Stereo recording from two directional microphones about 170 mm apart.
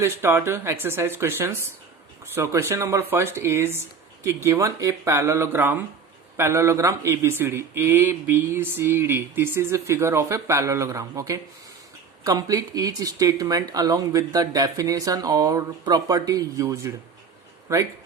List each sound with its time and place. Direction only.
0.0 s a man's voice: 15° right (ahead or behind)